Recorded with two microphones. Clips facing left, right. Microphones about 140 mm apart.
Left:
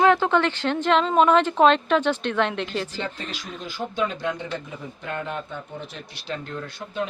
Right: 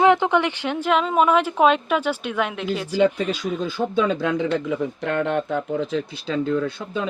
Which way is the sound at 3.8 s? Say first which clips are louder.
Right 4 dB; 90° right.